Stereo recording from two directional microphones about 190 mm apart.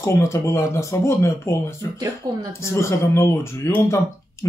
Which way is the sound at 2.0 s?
20° right (ahead or behind).